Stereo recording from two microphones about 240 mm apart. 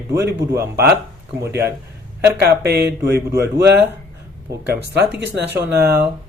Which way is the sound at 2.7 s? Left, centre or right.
Right.